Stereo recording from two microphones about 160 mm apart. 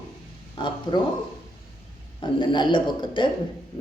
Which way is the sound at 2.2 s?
30° left (ahead or behind).